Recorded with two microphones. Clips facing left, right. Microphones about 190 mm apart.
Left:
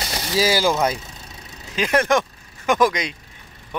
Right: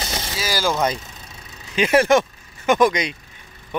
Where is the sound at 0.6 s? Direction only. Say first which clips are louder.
Left 1 dB; 5° left (ahead or behind).